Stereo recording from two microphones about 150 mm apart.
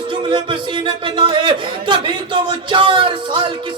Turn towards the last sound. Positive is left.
turn(degrees=-35)  # may be behind; listen again after turning